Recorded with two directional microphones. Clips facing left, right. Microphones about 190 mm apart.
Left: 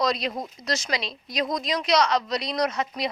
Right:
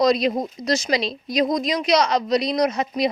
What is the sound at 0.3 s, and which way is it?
Speech, 20° right (ahead or behind).